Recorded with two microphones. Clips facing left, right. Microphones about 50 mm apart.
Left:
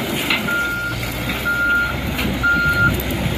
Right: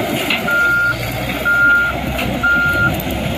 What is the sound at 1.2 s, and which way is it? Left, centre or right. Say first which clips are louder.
Reversing beeps: right 6 dB; right.